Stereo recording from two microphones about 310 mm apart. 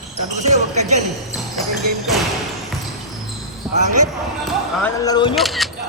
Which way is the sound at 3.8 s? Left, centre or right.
Right.